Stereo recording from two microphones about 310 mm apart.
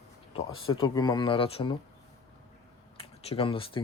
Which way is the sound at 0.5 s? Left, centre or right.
Left.